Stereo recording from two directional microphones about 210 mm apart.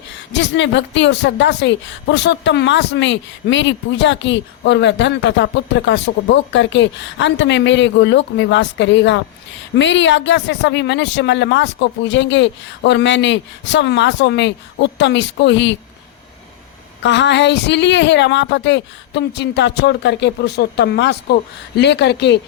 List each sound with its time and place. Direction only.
0.3 s a woman's voice: 60° left (ahead or behind)
17.0 s a woman's voice: 55° left (ahead or behind)